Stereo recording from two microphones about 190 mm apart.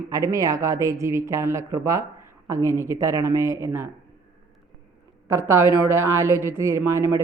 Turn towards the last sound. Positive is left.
turn(degrees=-15)  # may be behind; listen again after turning